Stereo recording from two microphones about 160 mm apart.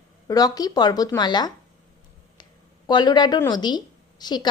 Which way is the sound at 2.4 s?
25° left (ahead or behind).